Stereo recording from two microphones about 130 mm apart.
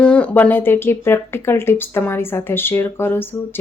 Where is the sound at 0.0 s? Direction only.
10° left (ahead or behind).